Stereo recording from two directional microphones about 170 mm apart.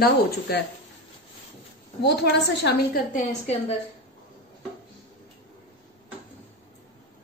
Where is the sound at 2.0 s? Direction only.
80° left; by 3.2 s 60° left (ahead or behind).